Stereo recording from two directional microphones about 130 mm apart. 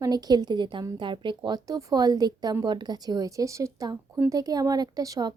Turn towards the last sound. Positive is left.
turn(degrees=-30)  # may be behind; listen again after turning